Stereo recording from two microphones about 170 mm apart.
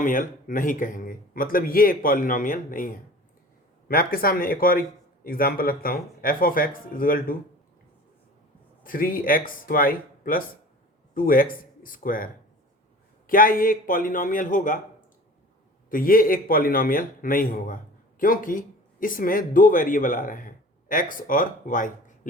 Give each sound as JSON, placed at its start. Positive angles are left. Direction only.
{"t": 0.0, "sound": "speech", "side_deg": 50}
{"t": 8.8, "sound": "speech", "side_deg": 55}
{"t": 15.9, "sound": "speech", "side_deg": 55}